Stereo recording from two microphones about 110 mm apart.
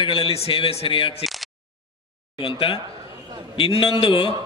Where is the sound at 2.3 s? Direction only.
55° left (ahead or behind).